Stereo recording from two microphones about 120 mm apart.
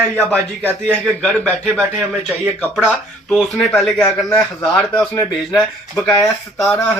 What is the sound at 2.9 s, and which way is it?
A man's voice, 5° left (ahead or behind).